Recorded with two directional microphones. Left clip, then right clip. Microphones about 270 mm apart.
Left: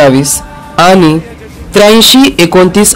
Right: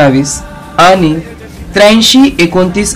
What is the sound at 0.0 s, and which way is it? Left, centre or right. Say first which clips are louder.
Speech: left 2 dB; left.